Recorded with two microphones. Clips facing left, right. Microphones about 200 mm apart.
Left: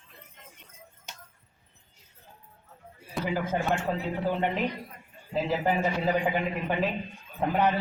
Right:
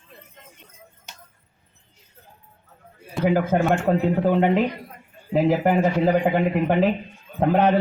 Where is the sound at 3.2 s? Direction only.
60° right (ahead or behind).